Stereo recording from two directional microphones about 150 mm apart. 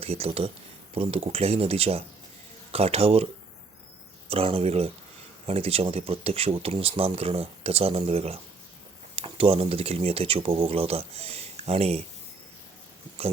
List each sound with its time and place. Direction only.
0.0 s speech: 40° right (ahead or behind)
4.3 s speech: 40° right (ahead or behind)